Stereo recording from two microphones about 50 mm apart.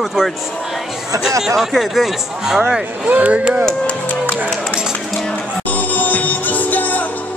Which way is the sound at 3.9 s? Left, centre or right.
Left.